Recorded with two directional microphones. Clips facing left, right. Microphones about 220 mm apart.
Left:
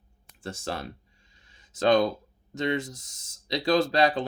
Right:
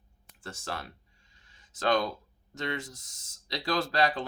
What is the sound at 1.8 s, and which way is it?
Speech, 25° left (ahead or behind).